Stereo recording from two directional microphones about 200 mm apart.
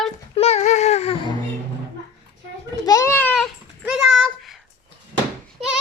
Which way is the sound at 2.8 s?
15° left (ahead or behind).